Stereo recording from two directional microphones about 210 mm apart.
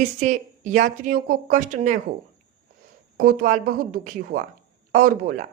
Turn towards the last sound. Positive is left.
turn(degrees=-40)  # may be behind; listen again after turning